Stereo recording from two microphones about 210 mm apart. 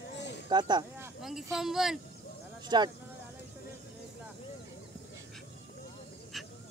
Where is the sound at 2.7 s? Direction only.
20° right (ahead or behind).